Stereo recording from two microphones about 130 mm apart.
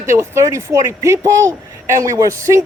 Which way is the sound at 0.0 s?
20° right (ahead or behind).